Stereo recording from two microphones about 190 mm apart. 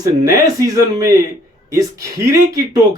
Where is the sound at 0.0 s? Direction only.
20° right (ahead or behind).